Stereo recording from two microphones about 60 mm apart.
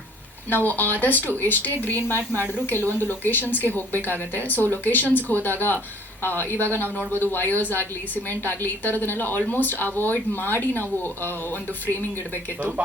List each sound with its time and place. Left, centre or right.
0.5 s a woman's voice: left